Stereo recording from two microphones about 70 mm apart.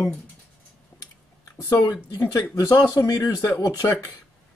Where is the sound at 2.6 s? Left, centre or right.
Left.